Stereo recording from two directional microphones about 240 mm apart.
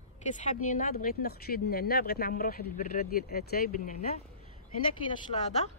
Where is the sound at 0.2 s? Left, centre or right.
Left.